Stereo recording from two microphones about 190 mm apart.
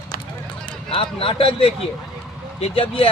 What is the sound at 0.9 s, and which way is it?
A man's voice, 30° left (ahead or behind).